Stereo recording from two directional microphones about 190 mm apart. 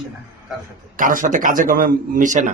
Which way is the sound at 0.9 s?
45° right (ahead or behind).